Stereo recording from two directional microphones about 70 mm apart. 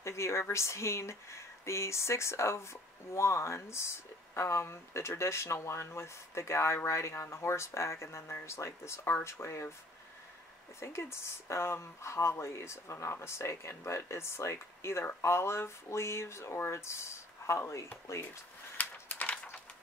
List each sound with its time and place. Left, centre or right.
0.0 s speech: left
10.8 s speech: left
18.8 s a sound: left